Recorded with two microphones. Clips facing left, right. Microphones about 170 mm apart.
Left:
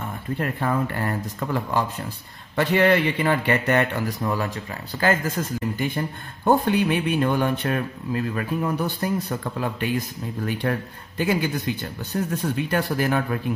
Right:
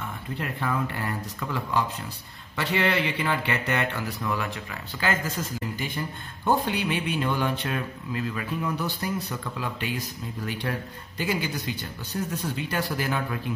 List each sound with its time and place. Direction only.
0.4 s a man's voice: 50° left (ahead or behind)